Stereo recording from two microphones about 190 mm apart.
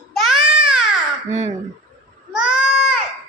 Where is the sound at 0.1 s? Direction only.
Centre (ahead or behind).